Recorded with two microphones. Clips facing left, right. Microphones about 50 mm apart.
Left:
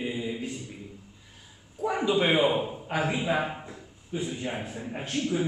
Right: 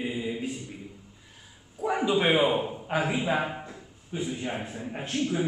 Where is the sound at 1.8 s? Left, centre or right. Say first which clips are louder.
Even; centre.